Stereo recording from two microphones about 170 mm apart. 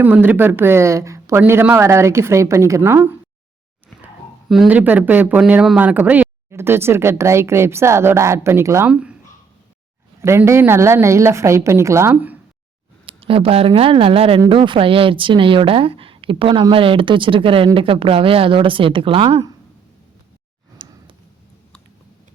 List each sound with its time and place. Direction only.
0.0 s speech: 10° right (ahead or behind)
4.0 s speech: centre (ahead or behind)
10.2 s speech: 15° right (ahead or behind)
13.1 s a woman's voice: 35° right (ahead or behind)
20.8 s a sound: 30° right (ahead or behind)